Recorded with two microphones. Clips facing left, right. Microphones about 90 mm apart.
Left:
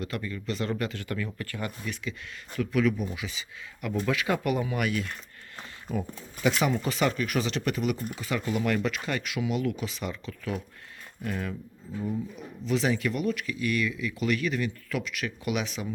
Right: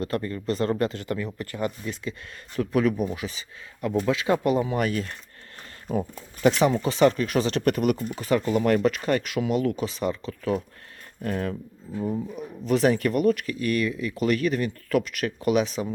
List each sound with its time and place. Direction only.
0.0 s speech: 40° right (ahead or behind)
2.6 s speech: 40° right (ahead or behind)